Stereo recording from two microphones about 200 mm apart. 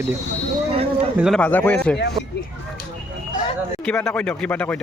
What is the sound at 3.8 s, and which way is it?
Speech, 5° left (ahead or behind).